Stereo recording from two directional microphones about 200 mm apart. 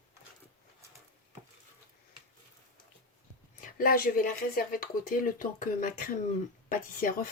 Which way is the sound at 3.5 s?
45° left (ahead or behind).